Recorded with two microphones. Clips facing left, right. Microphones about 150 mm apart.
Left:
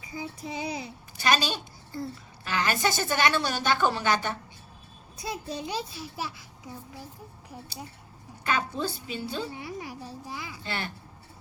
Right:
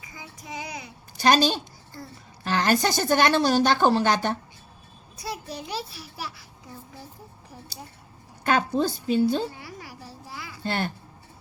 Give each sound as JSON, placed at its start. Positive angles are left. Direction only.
{"t": 0.1, "sound": "a child's voice", "side_deg": 30}
{"t": 1.1, "sound": "a woman's voice", "side_deg": -40}
{"t": 2.4, "sound": "a woman's voice", "side_deg": -40}
{"t": 5.1, "sound": "a child's voice", "side_deg": 20}
{"t": 8.4, "sound": "a woman's voice", "side_deg": -40}
{"t": 9.5, "sound": "a child's voice", "side_deg": 20}
{"t": 10.6, "sound": "a woman's voice", "side_deg": -50}